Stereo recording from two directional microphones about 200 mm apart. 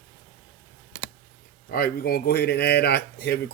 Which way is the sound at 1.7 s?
50° left (ahead or behind).